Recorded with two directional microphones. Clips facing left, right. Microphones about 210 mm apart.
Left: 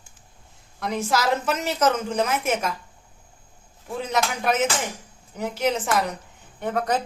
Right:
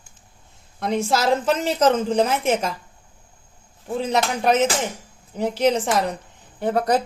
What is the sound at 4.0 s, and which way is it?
A woman's voice, 30° right (ahead or behind).